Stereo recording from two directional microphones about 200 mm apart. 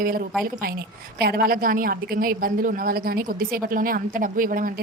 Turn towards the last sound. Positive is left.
turn(degrees=-45)  # may be behind; listen again after turning